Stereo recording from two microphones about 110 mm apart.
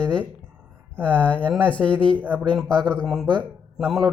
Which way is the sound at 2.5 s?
10° left (ahead or behind).